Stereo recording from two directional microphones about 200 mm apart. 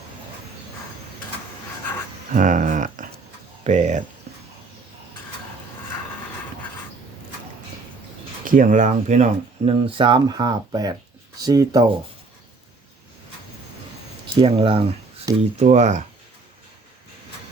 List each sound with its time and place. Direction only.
2.3 s speech: 40° right (ahead or behind)
8.4 s speech: 45° right (ahead or behind); by 11.9 s 15° right (ahead or behind)
14.3 s speech: 25° right (ahead or behind)